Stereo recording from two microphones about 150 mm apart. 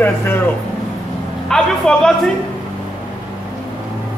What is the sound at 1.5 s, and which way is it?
Speech, 5° left (ahead or behind).